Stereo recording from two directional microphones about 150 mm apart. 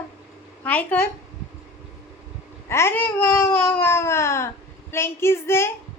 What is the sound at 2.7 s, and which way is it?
Babbling, 15° left (ahead or behind).